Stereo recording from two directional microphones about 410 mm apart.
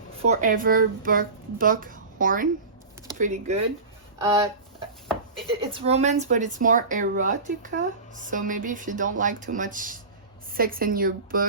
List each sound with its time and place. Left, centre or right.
0.3 s speech: centre
5.5 s speech: centre